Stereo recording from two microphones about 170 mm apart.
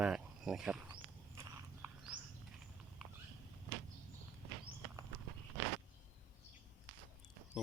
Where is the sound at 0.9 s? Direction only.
15° right (ahead or behind).